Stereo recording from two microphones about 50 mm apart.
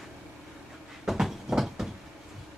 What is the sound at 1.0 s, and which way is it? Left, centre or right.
Train, centre.